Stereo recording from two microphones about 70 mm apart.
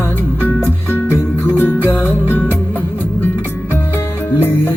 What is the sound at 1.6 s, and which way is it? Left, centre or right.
Music, left.